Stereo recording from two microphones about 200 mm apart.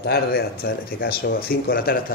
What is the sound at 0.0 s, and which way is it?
A man's voice, 55° left (ahead or behind).